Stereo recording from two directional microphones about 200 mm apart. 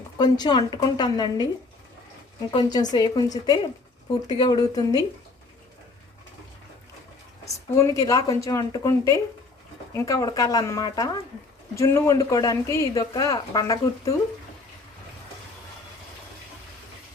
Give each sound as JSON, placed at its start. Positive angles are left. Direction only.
{"t": 0.2, "sound": "speech", "side_deg": 20}
{"t": 2.5, "sound": "speech", "side_deg": 20}
{"t": 7.4, "sound": "speech", "side_deg": 15}